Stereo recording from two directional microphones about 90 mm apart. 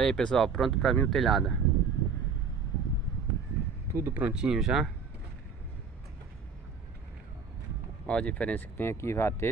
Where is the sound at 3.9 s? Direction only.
30° right (ahead or behind).